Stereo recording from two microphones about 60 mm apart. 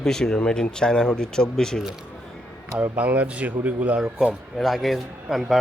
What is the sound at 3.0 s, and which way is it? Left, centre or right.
Speech, right.